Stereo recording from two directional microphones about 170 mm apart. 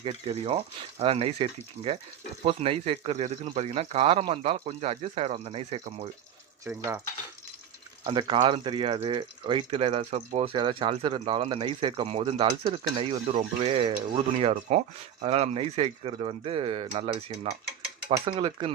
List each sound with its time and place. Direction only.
0.0 s speech: 35° right (ahead or behind)
6.7 s speech: 15° right (ahead or behind)
8.0 s speech: 30° right (ahead or behind)
18.1 s stir: 30° right (ahead or behind)